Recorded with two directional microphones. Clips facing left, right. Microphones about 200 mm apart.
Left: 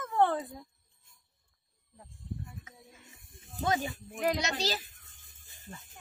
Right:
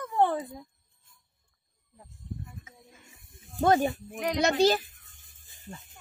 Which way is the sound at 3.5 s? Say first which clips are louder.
Right 8 dB; 55° right (ahead or behind).